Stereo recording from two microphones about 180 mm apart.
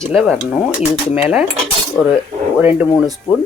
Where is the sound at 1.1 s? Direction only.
35° left (ahead or behind).